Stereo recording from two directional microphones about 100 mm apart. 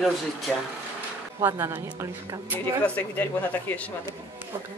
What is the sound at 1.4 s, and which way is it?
Speech, 25° right (ahead or behind).